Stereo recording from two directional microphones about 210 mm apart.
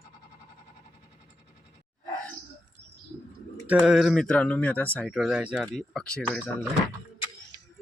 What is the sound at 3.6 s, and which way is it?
Speech, 5° right (ahead or behind).